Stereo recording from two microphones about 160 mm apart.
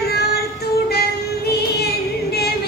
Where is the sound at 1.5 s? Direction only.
85° left.